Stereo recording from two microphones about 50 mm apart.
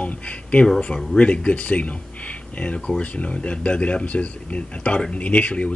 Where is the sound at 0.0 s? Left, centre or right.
Left.